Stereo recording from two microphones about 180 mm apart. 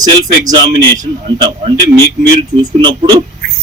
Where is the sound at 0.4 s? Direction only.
20° right (ahead or behind).